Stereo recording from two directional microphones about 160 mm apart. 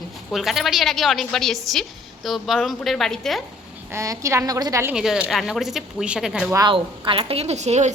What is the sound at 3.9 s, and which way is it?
Speech, 20° right (ahead or behind).